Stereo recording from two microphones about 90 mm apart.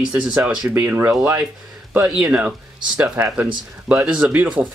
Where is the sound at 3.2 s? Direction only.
25° right (ahead or behind).